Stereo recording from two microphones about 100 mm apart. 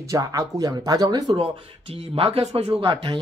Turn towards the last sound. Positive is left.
turn(degrees=-55)  # may be behind; listen again after turning